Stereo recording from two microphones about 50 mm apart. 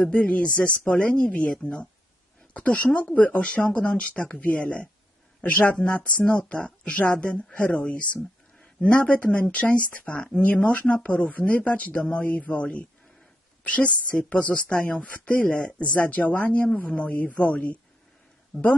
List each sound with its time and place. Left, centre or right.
0.1 s speech: left
18.5 s speech: centre